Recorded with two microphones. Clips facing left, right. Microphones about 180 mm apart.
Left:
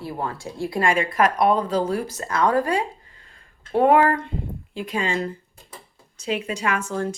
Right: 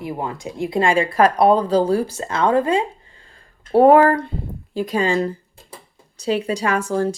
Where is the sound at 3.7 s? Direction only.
35° right (ahead or behind).